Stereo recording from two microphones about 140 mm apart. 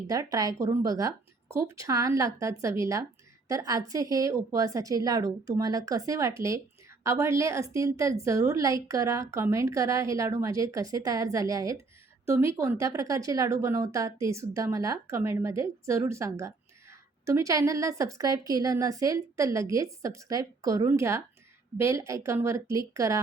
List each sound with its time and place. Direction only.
0.1 s a woman's voice: 25° right (ahead or behind)